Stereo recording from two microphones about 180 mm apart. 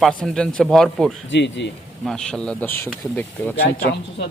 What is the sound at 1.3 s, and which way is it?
Speech, 80° left.